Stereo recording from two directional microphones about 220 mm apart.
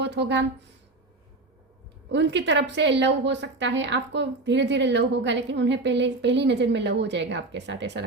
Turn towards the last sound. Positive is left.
turn(degrees=-55)  # may be behind; listen again after turning